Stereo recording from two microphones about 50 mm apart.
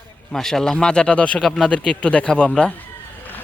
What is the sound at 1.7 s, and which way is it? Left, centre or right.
Speech, left.